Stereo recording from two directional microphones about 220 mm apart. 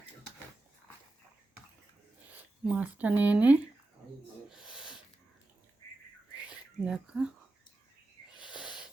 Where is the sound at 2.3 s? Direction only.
5° right (ahead or behind).